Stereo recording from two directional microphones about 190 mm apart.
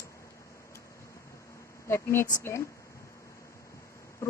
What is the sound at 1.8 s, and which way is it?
Speech, 15° left (ahead or behind).